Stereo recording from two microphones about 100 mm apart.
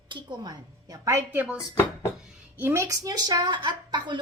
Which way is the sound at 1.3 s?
20° right (ahead or behind).